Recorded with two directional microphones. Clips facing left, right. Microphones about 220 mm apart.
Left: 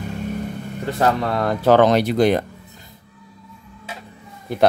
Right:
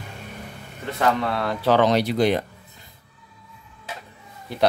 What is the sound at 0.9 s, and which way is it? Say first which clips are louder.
Speech: left 2 dB; 40° left (ahead or behind).